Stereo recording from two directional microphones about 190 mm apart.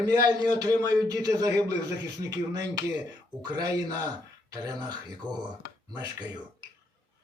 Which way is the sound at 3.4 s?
20° right (ahead or behind).